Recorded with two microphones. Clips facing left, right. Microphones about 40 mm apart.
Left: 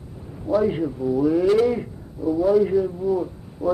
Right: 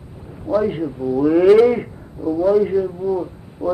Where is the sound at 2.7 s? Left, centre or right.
Centre.